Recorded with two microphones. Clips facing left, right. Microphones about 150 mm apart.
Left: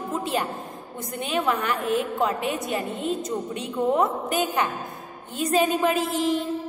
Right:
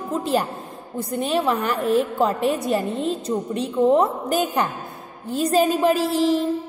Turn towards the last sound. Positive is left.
turn(degrees=-35)  # may be behind; listen again after turning